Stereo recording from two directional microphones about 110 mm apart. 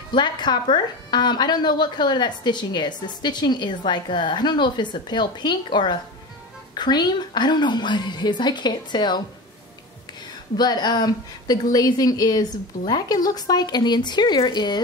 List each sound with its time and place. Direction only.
0.1 s a woman's voice: 45° left (ahead or behind)
10.6 s speech: 40° left (ahead or behind)